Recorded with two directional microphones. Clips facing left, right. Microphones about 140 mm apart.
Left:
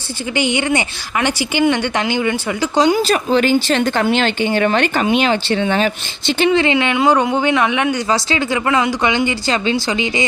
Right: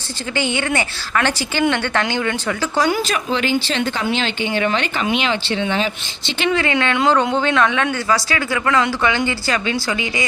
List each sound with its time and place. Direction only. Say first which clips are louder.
0.3 s a woman's voice: left 3 dB; 15° left (ahead or behind)
3.0 s speech: left 6 dB; 35° left (ahead or behind)
6.5 s speech: left 2 dB; 20° left (ahead or behind)
6.9 s a woman's voice: even; 10° left (ahead or behind)